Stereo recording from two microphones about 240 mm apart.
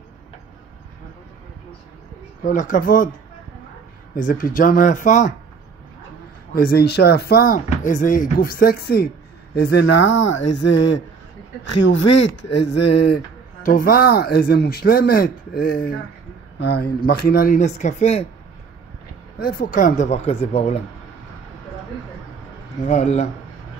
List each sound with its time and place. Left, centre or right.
2.4 s speech: left
4.1 s speech: left
6.5 s speech: left
12.0 s speech: left
13.6 s speech: left
19.3 s speech: left
22.8 s speech: left